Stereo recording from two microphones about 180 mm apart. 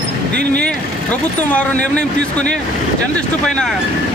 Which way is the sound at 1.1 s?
10° left (ahead or behind).